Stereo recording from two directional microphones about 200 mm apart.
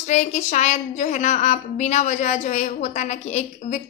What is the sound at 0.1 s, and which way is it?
A woman's voice, 35° left (ahead or behind).